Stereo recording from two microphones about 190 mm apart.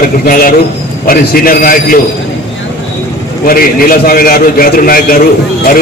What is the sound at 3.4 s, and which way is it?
A man's voice, 50° left (ahead or behind).